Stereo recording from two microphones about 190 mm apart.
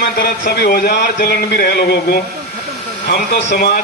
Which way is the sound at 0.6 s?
55° left (ahead or behind).